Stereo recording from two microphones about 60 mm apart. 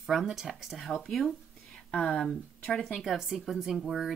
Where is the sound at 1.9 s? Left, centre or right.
Left.